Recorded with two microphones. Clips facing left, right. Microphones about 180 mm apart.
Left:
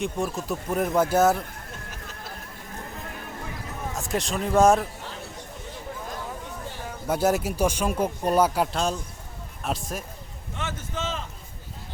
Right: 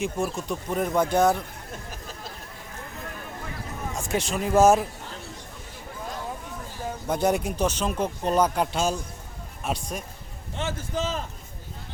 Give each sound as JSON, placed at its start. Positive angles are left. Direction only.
{"t": 0.0, "sound": "speech", "side_deg": 0}
{"t": 3.9, "sound": "speech", "side_deg": 0}
{"t": 7.1, "sound": "speech", "side_deg": 5}
{"t": 10.6, "sound": "a man's voice", "side_deg": -35}